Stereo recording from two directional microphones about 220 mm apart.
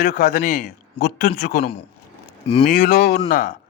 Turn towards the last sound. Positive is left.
turn(degrees=40)  # may be behind; listen again after turning